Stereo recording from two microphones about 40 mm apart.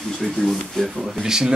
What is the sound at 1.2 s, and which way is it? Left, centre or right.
Speech, centre.